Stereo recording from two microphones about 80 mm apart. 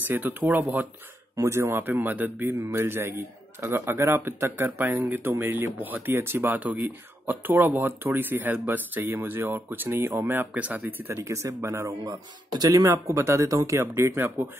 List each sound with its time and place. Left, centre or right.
0.1 s a man's voice: right
1.3 s speech: right
1.8 s a man's voice: right